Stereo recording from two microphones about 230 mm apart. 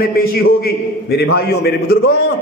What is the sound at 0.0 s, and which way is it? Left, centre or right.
A man's voice, left.